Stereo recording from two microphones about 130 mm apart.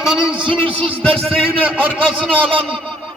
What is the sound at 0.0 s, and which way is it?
Speech, 5° right (ahead or behind).